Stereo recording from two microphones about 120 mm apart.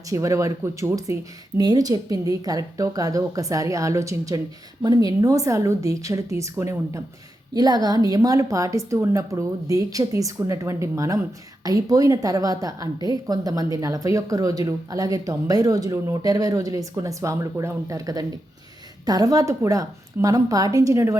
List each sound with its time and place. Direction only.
0.1 s a woman's voice: 25° right (ahead or behind)